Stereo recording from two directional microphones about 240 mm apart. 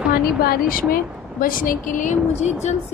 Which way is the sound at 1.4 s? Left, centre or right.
Left.